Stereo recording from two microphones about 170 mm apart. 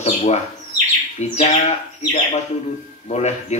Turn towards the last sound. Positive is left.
turn(degrees=40)  # may be behind; listen again after turning